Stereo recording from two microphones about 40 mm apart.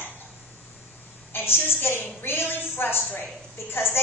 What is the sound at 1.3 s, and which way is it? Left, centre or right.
A woman's voice, left.